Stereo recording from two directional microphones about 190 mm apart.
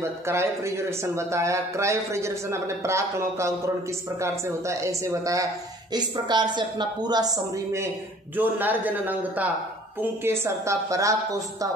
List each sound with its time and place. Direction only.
0.3 s a man's voice: 15° right (ahead or behind)
8.4 s a man's voice: 10° right (ahead or behind)